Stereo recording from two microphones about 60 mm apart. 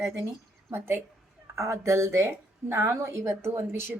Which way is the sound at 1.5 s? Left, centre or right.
Right.